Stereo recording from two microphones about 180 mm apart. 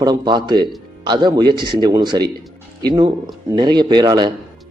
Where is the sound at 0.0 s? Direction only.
20° right (ahead or behind).